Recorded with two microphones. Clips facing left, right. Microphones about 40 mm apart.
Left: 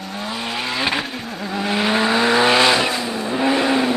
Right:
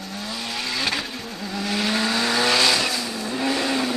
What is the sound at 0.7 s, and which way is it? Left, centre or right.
Vehicle, left.